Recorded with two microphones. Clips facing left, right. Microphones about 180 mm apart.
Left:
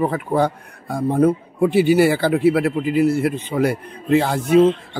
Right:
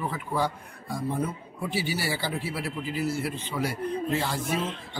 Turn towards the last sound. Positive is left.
turn(degrees=60)  # may be behind; listen again after turning